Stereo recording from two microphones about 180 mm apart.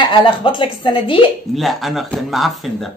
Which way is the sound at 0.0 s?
25° left (ahead or behind).